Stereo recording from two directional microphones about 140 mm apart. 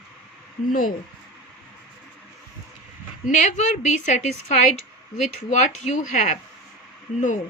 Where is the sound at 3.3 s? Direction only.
60° left (ahead or behind).